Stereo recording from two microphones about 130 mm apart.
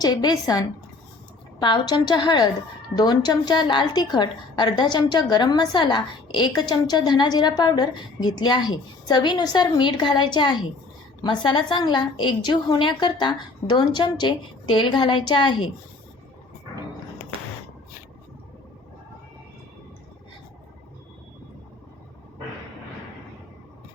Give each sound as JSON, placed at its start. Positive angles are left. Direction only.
{"t": 0.0, "sound": "a woman's voice", "side_deg": 30}